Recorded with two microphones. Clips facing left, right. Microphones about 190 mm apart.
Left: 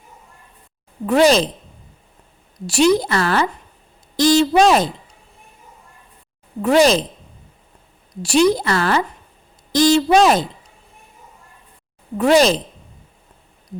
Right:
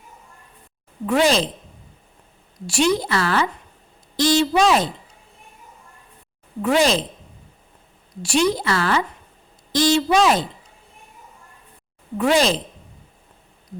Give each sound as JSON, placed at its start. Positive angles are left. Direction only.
{"t": 1.0, "sound": "a woman's voice", "side_deg": 40}
{"t": 2.6, "sound": "a woman's voice", "side_deg": 40}
{"t": 6.6, "sound": "a woman's voice", "side_deg": 40}
{"t": 8.2, "sound": "a woman's voice", "side_deg": 40}
{"t": 12.1, "sound": "a woman's voice", "side_deg": 40}